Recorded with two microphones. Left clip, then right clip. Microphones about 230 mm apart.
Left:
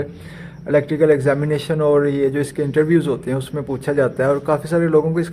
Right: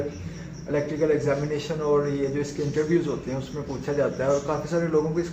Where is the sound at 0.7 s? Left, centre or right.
Left.